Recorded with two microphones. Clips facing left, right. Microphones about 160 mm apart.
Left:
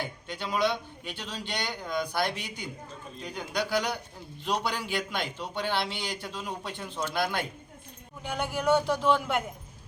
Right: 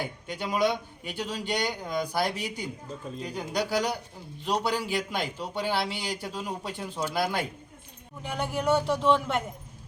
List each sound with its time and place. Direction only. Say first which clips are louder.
0.0 s a man's voice: right 2 dB; 15° right (ahead or behind)
2.1 s a man's voice: right 2 dB; 35° right (ahead or behind)
4.6 s a man's voice: right 3 dB; 5° right (ahead or behind)